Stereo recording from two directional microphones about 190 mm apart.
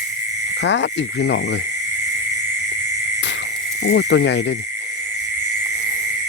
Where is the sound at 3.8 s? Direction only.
65° left (ahead or behind).